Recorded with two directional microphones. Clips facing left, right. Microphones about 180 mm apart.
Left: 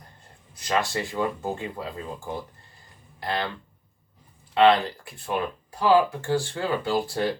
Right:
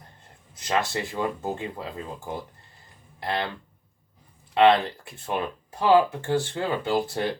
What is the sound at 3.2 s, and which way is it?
Speech, 20° right (ahead or behind).